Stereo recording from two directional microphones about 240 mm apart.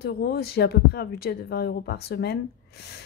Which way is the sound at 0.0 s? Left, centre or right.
Left.